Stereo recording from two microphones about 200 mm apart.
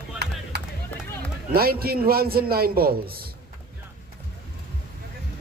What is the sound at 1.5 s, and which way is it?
A man's voice, 50° right (ahead or behind).